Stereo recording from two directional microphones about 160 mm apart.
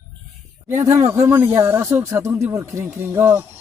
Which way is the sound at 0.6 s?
15° right (ahead or behind).